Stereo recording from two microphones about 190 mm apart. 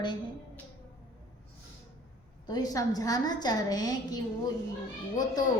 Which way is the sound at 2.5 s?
20° left (ahead or behind).